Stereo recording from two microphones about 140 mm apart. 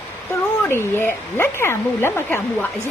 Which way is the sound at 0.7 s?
15° left (ahead or behind).